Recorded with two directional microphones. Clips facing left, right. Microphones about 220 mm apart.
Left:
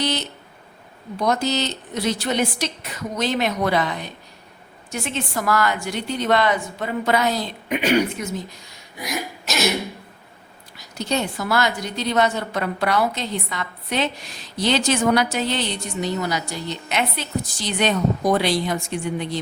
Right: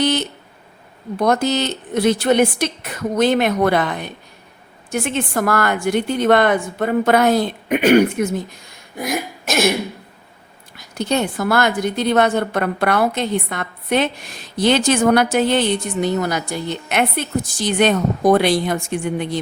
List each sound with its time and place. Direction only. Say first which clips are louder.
0.0 s a sound: right 6 dB; 55° right (ahead or behind)
1.2 s a woman's voice: right 4 dB; 55° right (ahead or behind)
9.0 s cough: right 5 dB; 50° right (ahead or behind)
10.8 s a woman's voice: right 4 dB; 55° right (ahead or behind)